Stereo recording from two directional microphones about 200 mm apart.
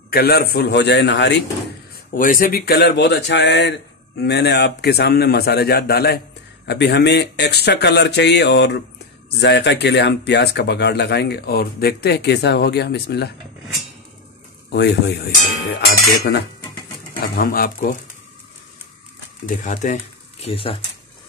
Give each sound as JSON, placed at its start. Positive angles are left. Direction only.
{"t": 0.1, "sound": "a man's voice", "side_deg": 50}
{"t": 2.1, "sound": "a man's voice", "side_deg": 45}
{"t": 14.7, "sound": "speech", "side_deg": 55}
{"t": 17.4, "sound": "speech", "side_deg": 45}
{"t": 19.4, "sound": "speech", "side_deg": 40}
{"t": 20.4, "sound": "speech", "side_deg": 30}